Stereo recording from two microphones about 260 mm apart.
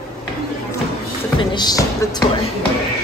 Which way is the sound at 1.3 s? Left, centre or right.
Centre.